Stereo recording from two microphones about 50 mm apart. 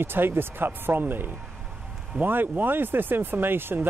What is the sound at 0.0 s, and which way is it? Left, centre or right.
Speech, right.